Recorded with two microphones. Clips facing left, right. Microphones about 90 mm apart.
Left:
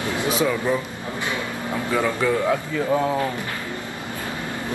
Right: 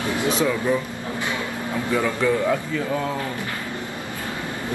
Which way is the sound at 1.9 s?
10° left (ahead or behind).